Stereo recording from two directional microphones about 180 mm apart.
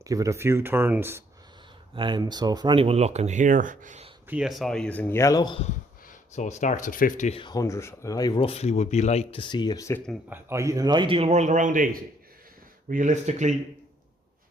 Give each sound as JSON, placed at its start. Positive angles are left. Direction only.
{"t": 0.0, "sound": "speech", "side_deg": -20}
{"t": 2.0, "sound": "speech", "side_deg": -25}
{"t": 4.3, "sound": "speech", "side_deg": -5}
{"t": 6.3, "sound": "speech", "side_deg": 40}
{"t": 7.3, "sound": "speech", "side_deg": 25}
{"t": 10.2, "sound": "speech", "side_deg": -15}